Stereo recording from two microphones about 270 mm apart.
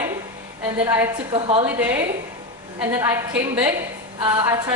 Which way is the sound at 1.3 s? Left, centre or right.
Right.